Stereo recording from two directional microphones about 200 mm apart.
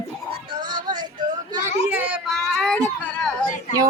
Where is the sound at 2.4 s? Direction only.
Centre (ahead or behind).